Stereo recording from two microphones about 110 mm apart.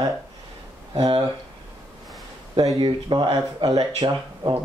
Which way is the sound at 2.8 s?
45° right (ahead or behind).